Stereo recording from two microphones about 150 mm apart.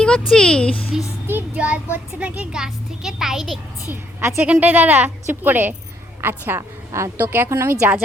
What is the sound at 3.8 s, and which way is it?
A woman's voice, 15° right (ahead or behind).